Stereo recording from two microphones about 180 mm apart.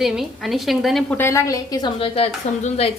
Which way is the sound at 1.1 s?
15° left (ahead or behind).